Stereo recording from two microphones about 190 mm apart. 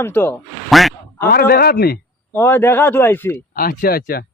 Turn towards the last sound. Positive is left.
turn(degrees=50)  # may be behind; listen again after turning